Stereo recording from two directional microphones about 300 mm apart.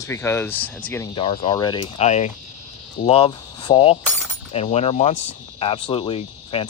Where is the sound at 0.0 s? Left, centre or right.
Centre.